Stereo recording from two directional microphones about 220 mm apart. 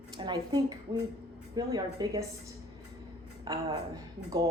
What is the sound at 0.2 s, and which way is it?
A woman's voice, 20° right (ahead or behind).